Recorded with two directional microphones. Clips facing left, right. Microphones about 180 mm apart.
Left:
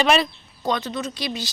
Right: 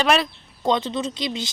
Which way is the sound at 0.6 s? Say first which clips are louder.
Right 3 dB; 25° right (ahead or behind).